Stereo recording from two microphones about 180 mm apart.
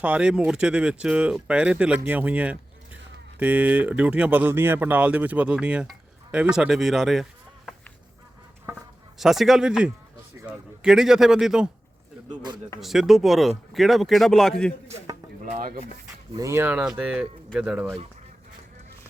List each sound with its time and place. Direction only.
0.0 s speech: 5° right (ahead or behind)
9.1 s speech: centre (ahead or behind)
12.3 s speech: 25° right (ahead or behind)
12.8 s speech: centre (ahead or behind)
15.4 s chopping: 50° right (ahead or behind)
16.3 s speech: 15° right (ahead or behind)